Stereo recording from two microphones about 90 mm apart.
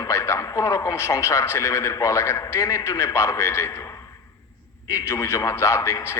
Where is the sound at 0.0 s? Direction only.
35° left (ahead or behind).